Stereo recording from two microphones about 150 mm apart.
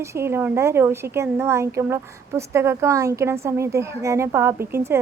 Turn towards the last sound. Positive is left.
turn(degrees=-15)  # may be behind; listen again after turning